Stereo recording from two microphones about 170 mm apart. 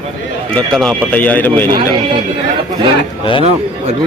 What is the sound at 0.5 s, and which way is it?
Speech, centre (ahead or behind).